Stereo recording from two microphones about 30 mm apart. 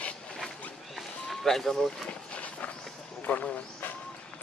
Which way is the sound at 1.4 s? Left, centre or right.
Centre.